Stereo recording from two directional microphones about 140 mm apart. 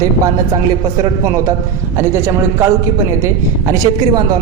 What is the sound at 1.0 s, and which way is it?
Speech, 25° right (ahead or behind).